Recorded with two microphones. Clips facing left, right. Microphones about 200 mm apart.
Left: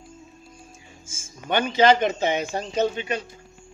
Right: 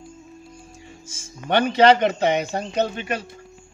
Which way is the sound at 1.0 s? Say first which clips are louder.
Right 3 dB; 65° right (ahead or behind).